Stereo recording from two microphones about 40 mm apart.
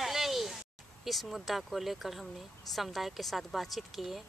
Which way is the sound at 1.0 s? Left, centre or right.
Centre.